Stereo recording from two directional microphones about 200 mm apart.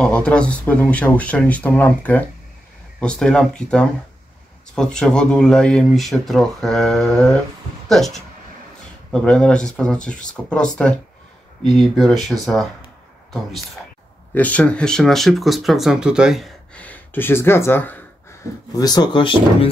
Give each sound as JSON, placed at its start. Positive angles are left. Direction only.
{"t": 0.0, "sound": "speech", "side_deg": 5}
{"t": 14.3, "sound": "speech", "side_deg": 5}